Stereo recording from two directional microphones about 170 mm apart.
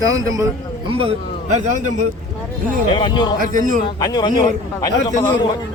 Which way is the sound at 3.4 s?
50° right (ahead or behind).